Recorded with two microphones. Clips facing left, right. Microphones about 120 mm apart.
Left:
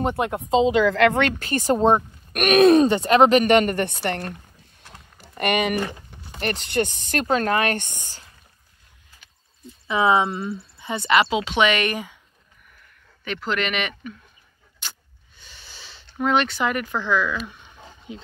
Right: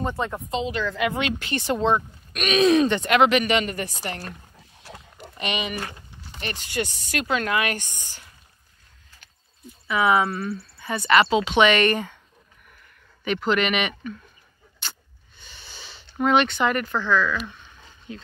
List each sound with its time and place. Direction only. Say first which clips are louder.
0.0 s speech: left 4 dB; 15° left (ahead or behind)
0.9 s speech: left 7 dB; 70° left (ahead or behind)
1.4 s a woman's voice: left 4 dB; 40° left (ahead or behind)
2.8 s a woman's voice: left 3 dB; 35° left (ahead or behind)
9.8 s speech: left 1 dB; 25° left (ahead or behind); by 12.2 s 10° left (ahead or behind)
13.2 s speech: right 3 dB; 5° right (ahead or behind)
15.4 s a sound: right 2 dB; centre (ahead or behind)
17.0 s speech: even; 15° left (ahead or behind)
17.5 s a sound: left 2 dB; 10° left (ahead or behind)